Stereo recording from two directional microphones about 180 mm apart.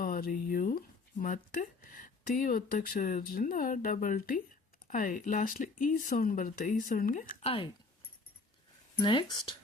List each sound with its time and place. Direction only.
0.0 s speech: 55° left (ahead or behind)
7.4 s speech: 30° left (ahead or behind)
9.0 s speech: 25° left (ahead or behind)